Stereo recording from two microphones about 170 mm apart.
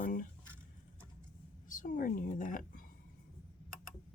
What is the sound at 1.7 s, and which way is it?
Speech, 50° left (ahead or behind).